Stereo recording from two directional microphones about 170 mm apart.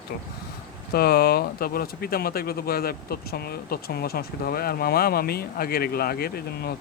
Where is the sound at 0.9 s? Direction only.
65° left (ahead or behind).